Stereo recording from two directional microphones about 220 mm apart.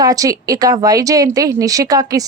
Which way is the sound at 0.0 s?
15° right (ahead or behind).